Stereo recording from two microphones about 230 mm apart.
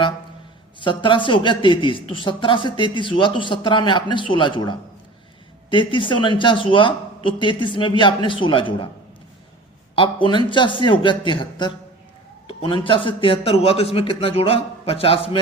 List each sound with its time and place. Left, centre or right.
0.8 s speech: left
9.9 s speech: left